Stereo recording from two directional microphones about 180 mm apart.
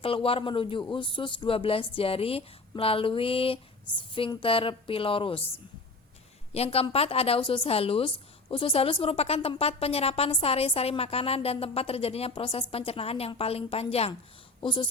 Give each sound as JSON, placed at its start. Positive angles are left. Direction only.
{"t": 0.0, "sound": "a woman's voice", "side_deg": 30}
{"t": 6.5, "sound": "a woman's voice", "side_deg": 35}